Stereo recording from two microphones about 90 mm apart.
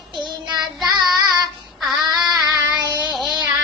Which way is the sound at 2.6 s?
50° right (ahead or behind).